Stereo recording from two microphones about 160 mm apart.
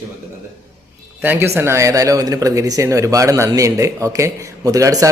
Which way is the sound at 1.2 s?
10° right (ahead or behind).